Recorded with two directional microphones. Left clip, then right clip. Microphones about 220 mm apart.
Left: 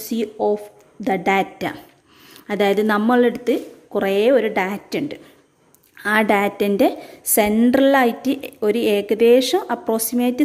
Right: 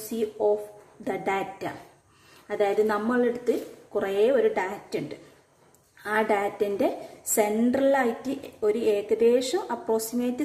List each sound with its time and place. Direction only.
0.1 s a woman's voice: 45° left (ahead or behind)